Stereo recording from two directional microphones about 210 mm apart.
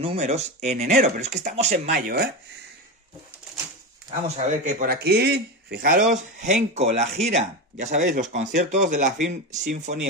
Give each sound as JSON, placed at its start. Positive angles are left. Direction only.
{"t": 0.0, "sound": "speech", "side_deg": -30}
{"t": 4.1, "sound": "speech", "side_deg": -35}
{"t": 6.4, "sound": "speech", "side_deg": -35}